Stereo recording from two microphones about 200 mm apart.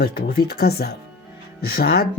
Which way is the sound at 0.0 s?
50° left (ahead or behind).